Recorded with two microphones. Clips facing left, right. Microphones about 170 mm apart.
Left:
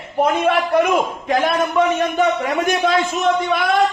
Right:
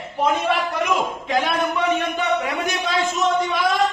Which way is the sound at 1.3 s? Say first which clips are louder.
Left 3 dB; 45° left (ahead or behind).